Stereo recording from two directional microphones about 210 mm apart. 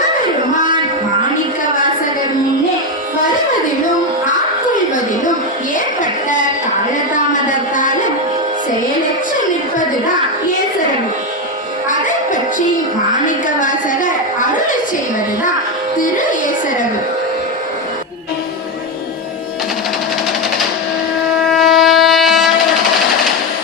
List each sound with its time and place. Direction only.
5.7 s music: 40° left (ahead or behind)
7.5 s music: 40° left (ahead or behind)
11.9 s music: 40° left (ahead or behind)
13.1 s a sound: 40° left (ahead or behind)
21.4 s wind instrument: centre (ahead or behind)